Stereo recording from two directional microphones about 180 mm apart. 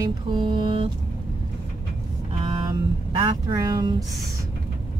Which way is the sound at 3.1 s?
25° right (ahead or behind).